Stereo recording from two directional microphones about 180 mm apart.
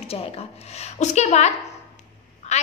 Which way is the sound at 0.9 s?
40° left (ahead or behind).